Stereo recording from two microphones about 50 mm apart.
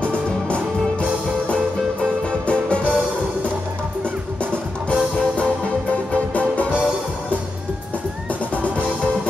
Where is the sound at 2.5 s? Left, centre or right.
Left.